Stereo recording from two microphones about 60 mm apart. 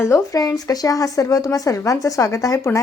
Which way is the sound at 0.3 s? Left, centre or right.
Left.